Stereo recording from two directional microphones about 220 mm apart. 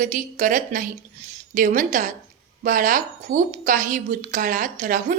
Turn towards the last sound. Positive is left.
turn(degrees=-35)  # may be behind; listen again after turning